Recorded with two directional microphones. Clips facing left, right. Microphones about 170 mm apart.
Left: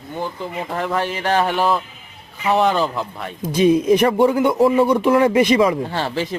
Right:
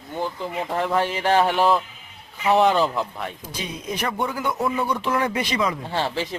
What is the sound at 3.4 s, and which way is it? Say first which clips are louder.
Speech: left 18 dB; 20° left (ahead or behind).